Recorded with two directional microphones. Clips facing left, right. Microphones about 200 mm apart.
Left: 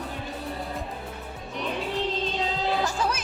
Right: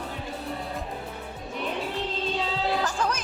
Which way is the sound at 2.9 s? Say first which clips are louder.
Even; 5° left (ahead or behind).